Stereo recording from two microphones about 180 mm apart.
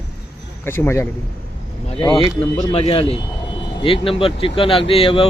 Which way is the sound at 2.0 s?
30° left (ahead or behind).